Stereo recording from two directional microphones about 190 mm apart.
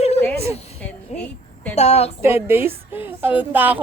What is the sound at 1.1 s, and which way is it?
Speech, 35° left (ahead or behind).